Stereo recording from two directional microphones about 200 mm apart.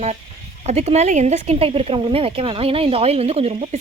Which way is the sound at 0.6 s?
35° right (ahead or behind).